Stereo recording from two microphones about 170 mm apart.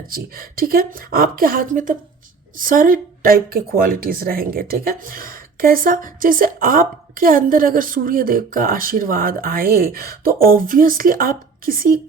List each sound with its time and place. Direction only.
0.1 s speech: 60° right (ahead or behind)